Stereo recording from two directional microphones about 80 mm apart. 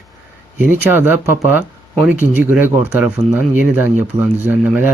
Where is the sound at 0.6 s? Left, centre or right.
Right.